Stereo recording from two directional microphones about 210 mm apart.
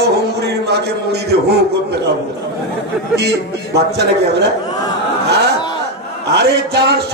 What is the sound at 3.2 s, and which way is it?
Speech, 50° right (ahead or behind).